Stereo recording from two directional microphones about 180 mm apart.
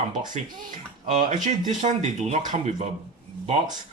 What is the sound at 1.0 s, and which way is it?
Speech, 40° right (ahead or behind).